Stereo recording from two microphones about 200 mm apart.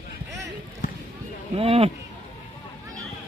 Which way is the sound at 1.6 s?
30° right (ahead or behind).